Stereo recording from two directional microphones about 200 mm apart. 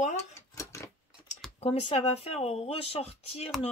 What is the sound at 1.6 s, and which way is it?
Speech, 25° left (ahead or behind).